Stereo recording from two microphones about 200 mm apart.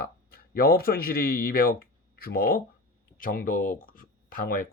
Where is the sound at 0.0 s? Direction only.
50° left (ahead or behind).